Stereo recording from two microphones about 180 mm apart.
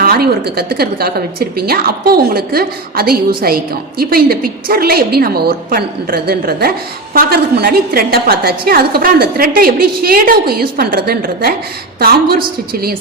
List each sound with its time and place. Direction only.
0.0 s a woman's voice: 60° right (ahead or behind)